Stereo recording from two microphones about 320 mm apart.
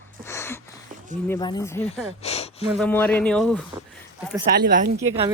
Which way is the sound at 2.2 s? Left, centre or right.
Centre.